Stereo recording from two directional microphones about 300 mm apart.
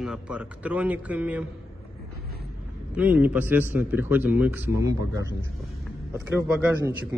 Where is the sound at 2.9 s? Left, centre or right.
Centre.